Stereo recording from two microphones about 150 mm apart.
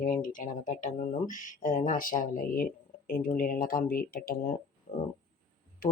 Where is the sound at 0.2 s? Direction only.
65° left (ahead or behind).